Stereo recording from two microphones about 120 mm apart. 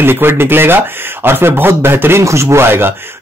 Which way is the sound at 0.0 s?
20° right (ahead or behind).